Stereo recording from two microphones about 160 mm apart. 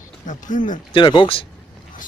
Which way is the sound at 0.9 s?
30° left (ahead or behind).